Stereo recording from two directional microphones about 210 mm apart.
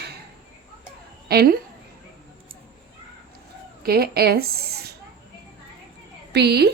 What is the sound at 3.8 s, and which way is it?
Speech, 45° right (ahead or behind).